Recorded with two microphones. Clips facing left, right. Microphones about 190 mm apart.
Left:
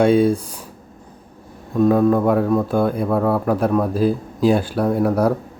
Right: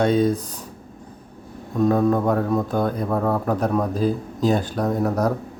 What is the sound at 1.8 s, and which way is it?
A man's voice, centre (ahead or behind).